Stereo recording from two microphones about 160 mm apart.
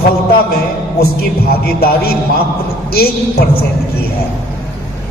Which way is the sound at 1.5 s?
70° left (ahead or behind).